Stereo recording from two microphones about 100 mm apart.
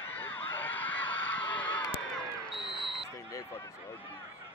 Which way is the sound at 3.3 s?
30° left (ahead or behind).